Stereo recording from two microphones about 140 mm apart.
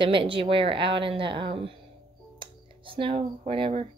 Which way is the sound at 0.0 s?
40° right (ahead or behind).